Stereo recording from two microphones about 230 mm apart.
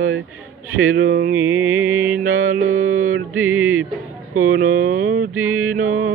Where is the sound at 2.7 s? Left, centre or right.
Right.